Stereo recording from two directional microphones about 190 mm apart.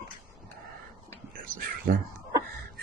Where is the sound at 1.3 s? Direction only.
45° right (ahead or behind).